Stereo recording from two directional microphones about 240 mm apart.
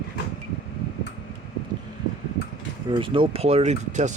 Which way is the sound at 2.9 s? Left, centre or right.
Right.